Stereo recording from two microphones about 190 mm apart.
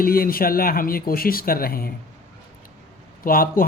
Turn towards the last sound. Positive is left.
turn(degrees=50)  # may be behind; listen again after turning